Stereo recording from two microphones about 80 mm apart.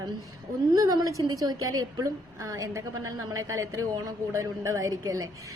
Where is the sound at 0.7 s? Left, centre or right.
Right.